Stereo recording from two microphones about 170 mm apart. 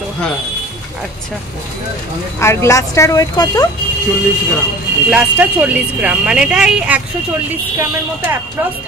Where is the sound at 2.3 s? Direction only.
15° left (ahead or behind).